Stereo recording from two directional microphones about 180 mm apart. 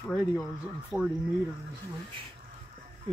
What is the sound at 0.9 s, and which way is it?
Speech, 5° right (ahead or behind).